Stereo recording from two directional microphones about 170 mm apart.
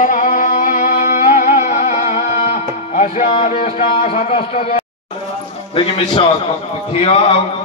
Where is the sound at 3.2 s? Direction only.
30° left (ahead or behind).